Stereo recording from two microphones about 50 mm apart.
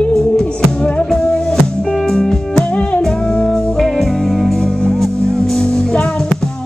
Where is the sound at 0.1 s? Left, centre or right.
Centre.